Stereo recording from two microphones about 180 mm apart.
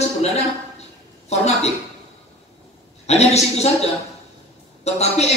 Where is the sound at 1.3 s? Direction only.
35° left (ahead or behind).